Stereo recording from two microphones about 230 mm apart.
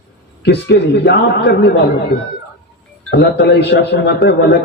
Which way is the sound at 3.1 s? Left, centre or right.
Left.